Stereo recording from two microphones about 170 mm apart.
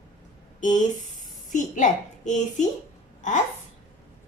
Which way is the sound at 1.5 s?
50° left (ahead or behind).